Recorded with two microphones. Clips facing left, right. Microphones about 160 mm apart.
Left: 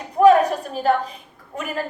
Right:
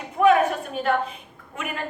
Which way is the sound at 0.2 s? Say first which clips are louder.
Left 4 dB; 35° left (ahead or behind).